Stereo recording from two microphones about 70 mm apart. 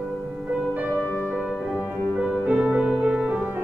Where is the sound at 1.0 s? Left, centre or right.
Left.